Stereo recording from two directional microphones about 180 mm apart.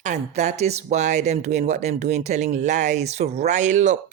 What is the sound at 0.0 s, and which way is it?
Speech, 40° right (ahead or behind).